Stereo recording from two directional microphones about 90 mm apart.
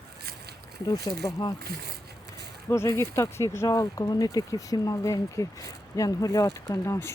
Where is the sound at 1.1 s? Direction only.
50° left (ahead or behind).